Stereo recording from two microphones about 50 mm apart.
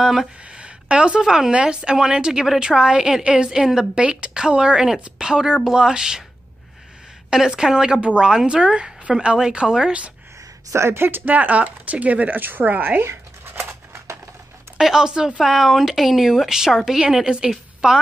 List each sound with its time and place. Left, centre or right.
0.0 s speech: centre
0.5 s a sound: right
1.2 s speech: centre
1.5 s speech: centre
7.2 s speech: centre
10.7 s speech: right
14.8 s speech: centre